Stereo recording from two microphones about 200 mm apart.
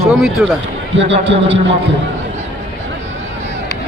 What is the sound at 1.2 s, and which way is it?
Speech, 60° right (ahead or behind).